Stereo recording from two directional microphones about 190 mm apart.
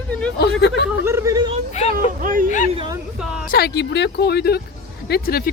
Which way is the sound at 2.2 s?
45° right (ahead or behind).